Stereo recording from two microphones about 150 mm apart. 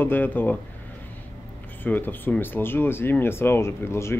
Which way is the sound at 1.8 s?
10° left (ahead or behind).